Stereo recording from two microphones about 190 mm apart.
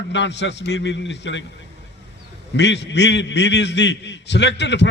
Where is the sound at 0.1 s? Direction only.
70° left (ahead or behind).